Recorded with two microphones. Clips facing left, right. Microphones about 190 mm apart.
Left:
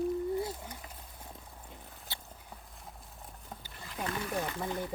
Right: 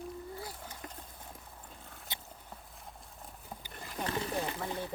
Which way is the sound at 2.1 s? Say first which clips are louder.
Even; 20° right (ahead or behind).